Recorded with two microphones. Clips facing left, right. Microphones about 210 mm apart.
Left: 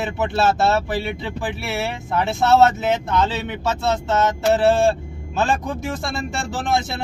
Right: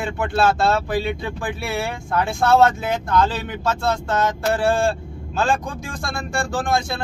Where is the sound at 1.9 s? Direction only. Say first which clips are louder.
Even; 20° left (ahead or behind).